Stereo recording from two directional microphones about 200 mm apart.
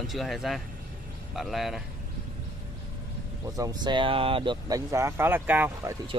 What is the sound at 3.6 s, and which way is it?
Speech, 20° right (ahead or behind).